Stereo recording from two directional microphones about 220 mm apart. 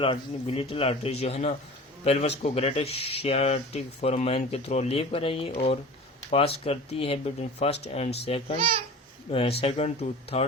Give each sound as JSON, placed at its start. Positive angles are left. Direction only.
{"t": 0.0, "sound": "speech", "side_deg": 25}
{"t": 8.5, "sound": "speech", "side_deg": -25}
{"t": 9.3, "sound": "speech", "side_deg": 25}